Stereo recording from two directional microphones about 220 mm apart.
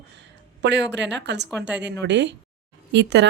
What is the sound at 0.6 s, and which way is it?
Speech, 50° right (ahead or behind).